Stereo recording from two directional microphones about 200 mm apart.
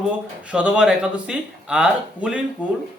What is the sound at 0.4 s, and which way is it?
Speech, 5° right (ahead or behind).